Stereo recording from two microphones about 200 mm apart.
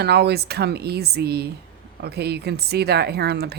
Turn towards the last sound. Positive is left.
turn(degrees=-55)  # may be behind; listen again after turning